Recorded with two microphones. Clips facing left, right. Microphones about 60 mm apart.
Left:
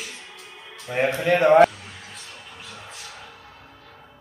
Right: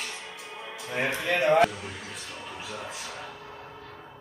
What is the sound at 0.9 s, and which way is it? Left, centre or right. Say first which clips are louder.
Speech: left 7 dB; left.